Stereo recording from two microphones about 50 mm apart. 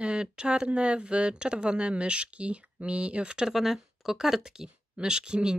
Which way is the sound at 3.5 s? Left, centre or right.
Centre.